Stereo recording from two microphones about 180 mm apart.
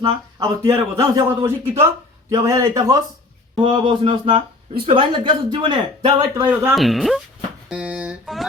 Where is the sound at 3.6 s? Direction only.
30° right (ahead or behind).